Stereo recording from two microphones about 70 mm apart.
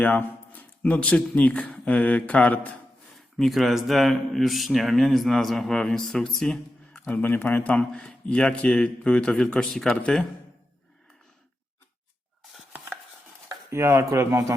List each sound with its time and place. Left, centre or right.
0.0 s speech: left
3.2 s speech: centre
7.1 s a man's voice: left; by 10.2 s centre
13.7 s speech: right